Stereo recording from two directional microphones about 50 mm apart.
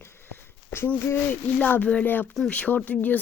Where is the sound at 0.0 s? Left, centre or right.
Left.